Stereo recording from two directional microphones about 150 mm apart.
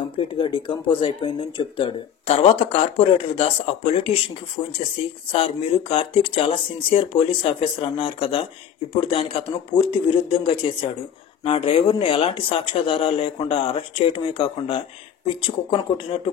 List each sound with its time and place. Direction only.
0.1 s speech: 35° left (ahead or behind)